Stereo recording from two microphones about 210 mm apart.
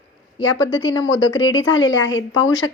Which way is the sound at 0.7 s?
65° left (ahead or behind).